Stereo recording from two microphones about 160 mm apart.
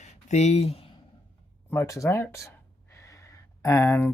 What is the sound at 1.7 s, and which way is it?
Speech, 20° left (ahead or behind).